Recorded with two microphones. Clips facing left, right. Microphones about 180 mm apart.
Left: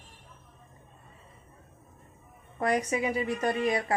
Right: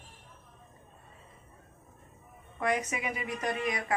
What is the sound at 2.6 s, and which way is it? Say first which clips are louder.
A woman's voice: left 4 dB; 35° left (ahead or behind).